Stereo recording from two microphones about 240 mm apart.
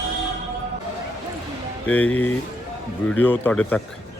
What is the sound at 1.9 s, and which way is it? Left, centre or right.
Speech, centre.